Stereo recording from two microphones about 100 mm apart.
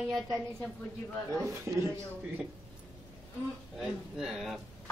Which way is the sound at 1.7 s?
30° right (ahead or behind).